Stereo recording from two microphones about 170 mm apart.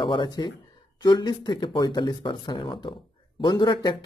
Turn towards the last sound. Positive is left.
turn(degrees=25)  # may be behind; listen again after turning